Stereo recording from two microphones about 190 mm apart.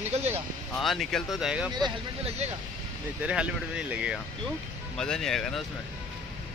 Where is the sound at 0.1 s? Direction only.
35° right (ahead or behind).